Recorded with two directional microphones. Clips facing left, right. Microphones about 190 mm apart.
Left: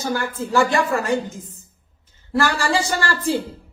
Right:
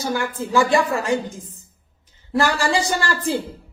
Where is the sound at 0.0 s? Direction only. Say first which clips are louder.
Even; 15° right (ahead or behind).